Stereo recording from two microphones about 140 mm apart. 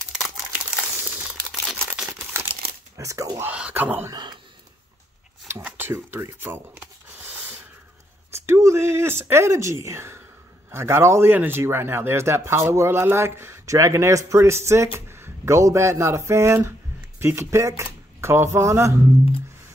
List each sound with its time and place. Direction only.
0.0 s crumpling: 5° right (ahead or behind)
3.0 s speech: 20° right (ahead or behind)
3.4 s speech: 10° right (ahead or behind)
4.1 s a man's voice: 30° right (ahead or behind)
5.6 s a sound: 10° right (ahead or behind)
8.5 s speech: 20° right (ahead or behind)